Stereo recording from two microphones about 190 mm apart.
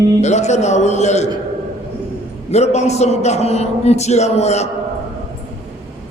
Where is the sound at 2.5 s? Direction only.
35° left (ahead or behind).